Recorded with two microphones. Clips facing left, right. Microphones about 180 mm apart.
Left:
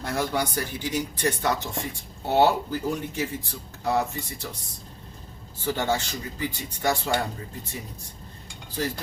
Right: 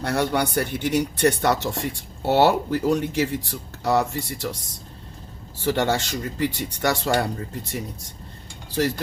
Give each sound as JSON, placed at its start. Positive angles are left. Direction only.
{"t": 0.0, "sound": "speech", "side_deg": -70}
{"t": 5.6, "sound": "speech", "side_deg": -75}
{"t": 8.8, "sound": "speech", "side_deg": -75}